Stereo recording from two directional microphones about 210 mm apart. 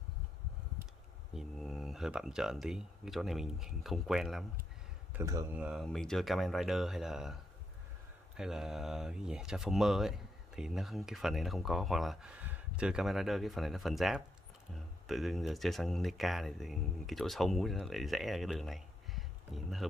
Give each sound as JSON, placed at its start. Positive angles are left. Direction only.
{"t": 1.3, "sound": "speech", "side_deg": 0}
{"t": 5.1, "sound": "speech", "side_deg": -15}
{"t": 8.4, "sound": "speech", "side_deg": 0}